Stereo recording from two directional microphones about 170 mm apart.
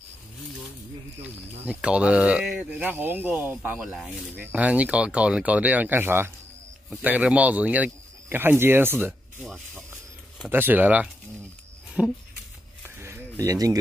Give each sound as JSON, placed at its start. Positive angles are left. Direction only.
{"t": 1.7, "sound": "speech", "side_deg": -5}
{"t": 9.4, "sound": "speech", "side_deg": 0}
{"t": 10.4, "sound": "speech", "side_deg": -10}
{"t": 12.8, "sound": "a sound", "side_deg": -15}